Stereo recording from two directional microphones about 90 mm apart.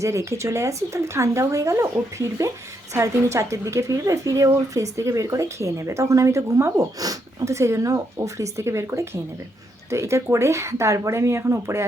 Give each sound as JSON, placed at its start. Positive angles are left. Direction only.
{"t": 0.0, "sound": "a woman's voice", "side_deg": -35}